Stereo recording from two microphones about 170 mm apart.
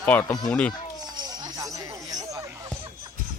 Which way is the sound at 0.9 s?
25° right (ahead or behind).